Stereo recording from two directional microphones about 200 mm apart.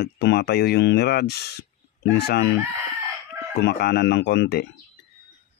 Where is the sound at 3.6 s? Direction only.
55° left (ahead or behind).